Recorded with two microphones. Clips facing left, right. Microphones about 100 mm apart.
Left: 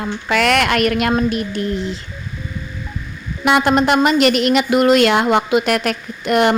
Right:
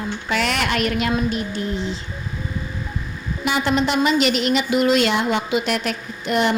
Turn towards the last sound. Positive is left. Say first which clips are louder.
# left 5 dB
turn(degrees=60)  # may be behind; listen again after turning